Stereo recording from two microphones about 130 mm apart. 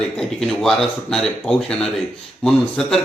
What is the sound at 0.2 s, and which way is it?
Speech, 5° left (ahead or behind).